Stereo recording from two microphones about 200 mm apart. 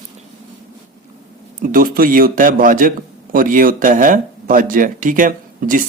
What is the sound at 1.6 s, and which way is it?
A man's voice, 45° right (ahead or behind).